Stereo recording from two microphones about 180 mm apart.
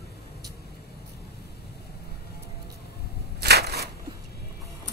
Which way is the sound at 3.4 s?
65° right (ahead or behind).